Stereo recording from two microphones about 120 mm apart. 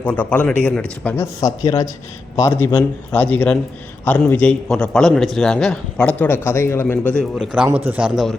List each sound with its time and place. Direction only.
0.0 s a man's voice: 15° left (ahead or behind)
1.4 s a man's voice: 30° left (ahead or behind); by 7.3 s 10° left (ahead or behind)
7.3 s a man's voice: 5° right (ahead or behind)